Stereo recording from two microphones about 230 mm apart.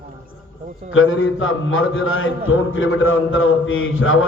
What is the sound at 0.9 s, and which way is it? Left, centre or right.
Mantra, left.